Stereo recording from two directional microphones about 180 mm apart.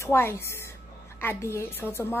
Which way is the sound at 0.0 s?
15° left (ahead or behind).